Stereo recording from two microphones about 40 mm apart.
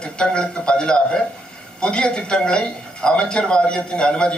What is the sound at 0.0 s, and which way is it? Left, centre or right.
A man's voice, left.